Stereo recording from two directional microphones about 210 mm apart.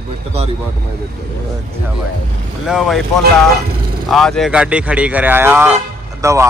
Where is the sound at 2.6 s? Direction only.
Centre (ahead or behind).